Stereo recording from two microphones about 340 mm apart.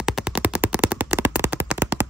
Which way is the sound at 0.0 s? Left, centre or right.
Centre.